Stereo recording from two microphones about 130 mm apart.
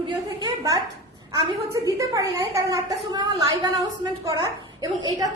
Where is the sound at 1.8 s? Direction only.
25° right (ahead or behind).